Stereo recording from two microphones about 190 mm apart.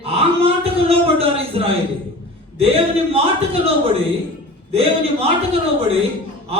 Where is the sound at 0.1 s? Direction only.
30° right (ahead or behind).